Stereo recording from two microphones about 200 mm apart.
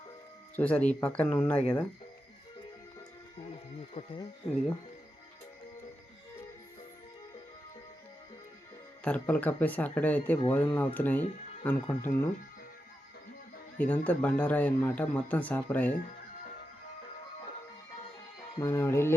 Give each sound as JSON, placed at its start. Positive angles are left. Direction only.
{"t": 0.5, "sound": "speech", "side_deg": 5}
{"t": 3.5, "sound": "a sound", "side_deg": 25}
{"t": 9.0, "sound": "speech", "side_deg": 5}
{"t": 13.7, "sound": "speech", "side_deg": 5}
{"t": 18.6, "sound": "speech", "side_deg": 15}